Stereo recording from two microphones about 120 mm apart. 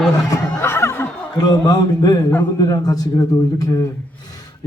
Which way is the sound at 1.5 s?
35° left (ahead or behind).